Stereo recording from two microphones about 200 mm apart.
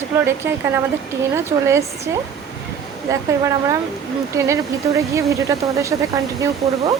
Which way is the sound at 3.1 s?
15° right (ahead or behind).